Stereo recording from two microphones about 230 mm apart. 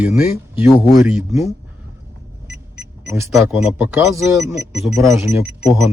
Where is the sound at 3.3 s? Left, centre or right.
Centre.